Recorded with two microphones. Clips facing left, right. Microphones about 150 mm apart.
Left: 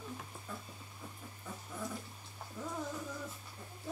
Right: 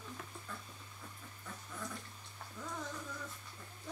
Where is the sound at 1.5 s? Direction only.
15° left (ahead or behind).